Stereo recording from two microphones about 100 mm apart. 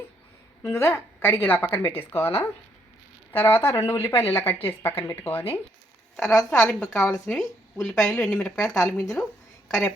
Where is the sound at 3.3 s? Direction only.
25° left (ahead or behind).